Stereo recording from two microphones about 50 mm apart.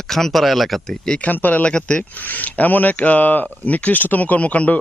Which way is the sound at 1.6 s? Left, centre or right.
Left.